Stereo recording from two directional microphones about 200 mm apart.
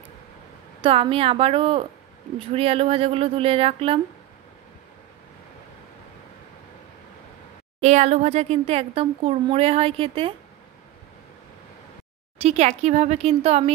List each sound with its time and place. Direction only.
0.8 s speech: 25° right (ahead or behind)
7.8 s speech: 35° right (ahead or behind)
12.4 s speech: 30° right (ahead or behind)